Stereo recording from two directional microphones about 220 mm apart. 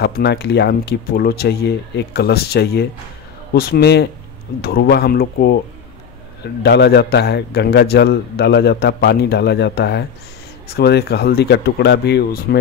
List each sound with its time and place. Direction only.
0.0 s a man's voice: 50° left (ahead or behind)